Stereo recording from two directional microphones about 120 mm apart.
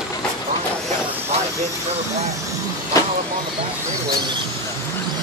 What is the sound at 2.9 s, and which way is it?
Vehicle, 30° left (ahead or behind).